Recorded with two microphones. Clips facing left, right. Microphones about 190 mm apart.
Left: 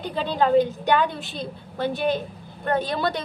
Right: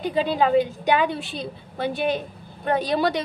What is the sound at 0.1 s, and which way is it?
A woman's voice, 5° right (ahead or behind).